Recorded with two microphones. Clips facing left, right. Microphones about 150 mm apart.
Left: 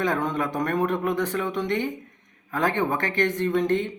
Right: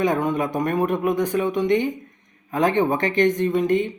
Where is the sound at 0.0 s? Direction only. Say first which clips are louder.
Right 4 dB; 15° right (ahead or behind).